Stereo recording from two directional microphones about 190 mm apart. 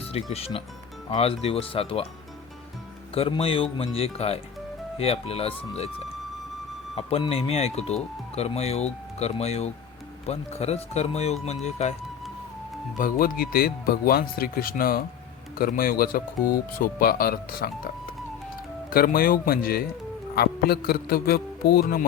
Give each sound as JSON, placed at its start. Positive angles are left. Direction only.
{"t": 0.1, "sound": "speech", "side_deg": 30}
{"t": 3.2, "sound": "speech", "side_deg": 30}
{"t": 6.9, "sound": "speech", "side_deg": 30}
{"t": 13.0, "sound": "speech", "side_deg": 45}
{"t": 18.9, "sound": "speech", "side_deg": 50}